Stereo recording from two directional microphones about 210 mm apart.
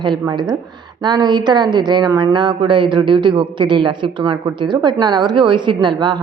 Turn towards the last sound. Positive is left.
turn(degrees=-20)  # may be behind; listen again after turning